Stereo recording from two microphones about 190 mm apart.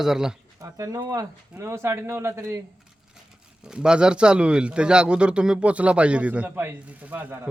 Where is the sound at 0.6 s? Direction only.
15° right (ahead or behind).